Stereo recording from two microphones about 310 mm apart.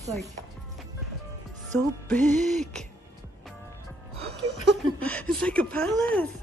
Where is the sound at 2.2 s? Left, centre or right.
Right.